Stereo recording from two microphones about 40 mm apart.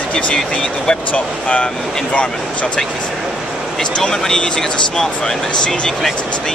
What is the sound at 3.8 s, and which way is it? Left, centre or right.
Speech, centre.